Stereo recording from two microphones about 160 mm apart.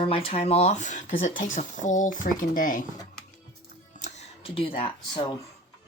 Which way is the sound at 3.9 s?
50° left (ahead or behind).